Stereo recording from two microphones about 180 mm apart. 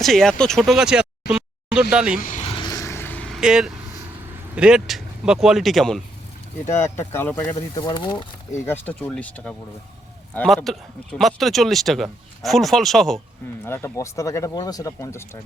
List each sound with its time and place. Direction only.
0.0 s speech: centre (ahead or behind)
2.2 s vehicle: 40° left (ahead or behind); by 3.7 s 5° right (ahead or behind)
4.5 s speech: 5° right (ahead or behind)
6.7 s speech: 15° left (ahead or behind)
7.8 s speech: 25° left (ahead or behind)
8.5 s speech: 10° left (ahead or behind)
13.7 s speech: 15° left (ahead or behind)